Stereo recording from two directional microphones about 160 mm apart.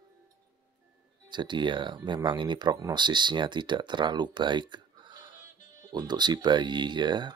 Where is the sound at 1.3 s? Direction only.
30° right (ahead or behind).